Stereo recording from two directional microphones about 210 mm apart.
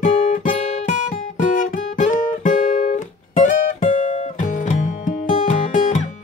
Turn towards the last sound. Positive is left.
turn(degrees=35)  # may be behind; listen again after turning